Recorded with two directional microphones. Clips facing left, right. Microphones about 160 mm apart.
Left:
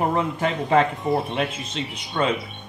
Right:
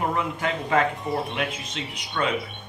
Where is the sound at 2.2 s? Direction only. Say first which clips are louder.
Left 3 dB; 30° left (ahead or behind).